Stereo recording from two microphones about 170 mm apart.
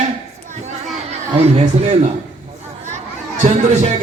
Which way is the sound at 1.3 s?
35° right (ahead or behind).